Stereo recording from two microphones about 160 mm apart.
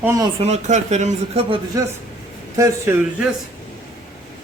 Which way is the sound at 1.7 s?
20° right (ahead or behind).